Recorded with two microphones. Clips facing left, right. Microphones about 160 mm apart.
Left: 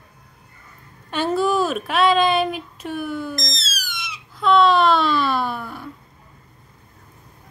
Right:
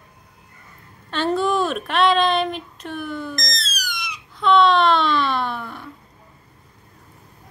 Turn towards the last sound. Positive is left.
turn(degrees=5)  # may be behind; listen again after turning